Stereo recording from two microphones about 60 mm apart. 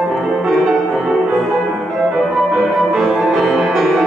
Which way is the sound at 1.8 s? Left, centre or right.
Centre.